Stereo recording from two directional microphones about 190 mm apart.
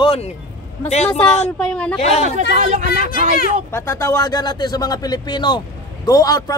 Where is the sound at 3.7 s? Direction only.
15° left (ahead or behind).